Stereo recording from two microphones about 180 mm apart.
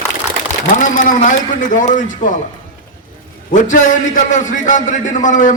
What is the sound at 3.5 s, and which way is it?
A man's voice, 45° left (ahead or behind).